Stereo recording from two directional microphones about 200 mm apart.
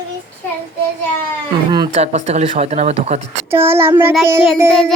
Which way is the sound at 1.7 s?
25° right (ahead or behind).